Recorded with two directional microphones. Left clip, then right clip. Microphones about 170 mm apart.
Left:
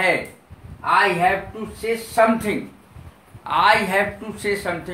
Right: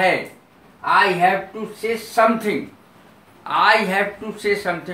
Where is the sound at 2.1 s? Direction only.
20° left (ahead or behind).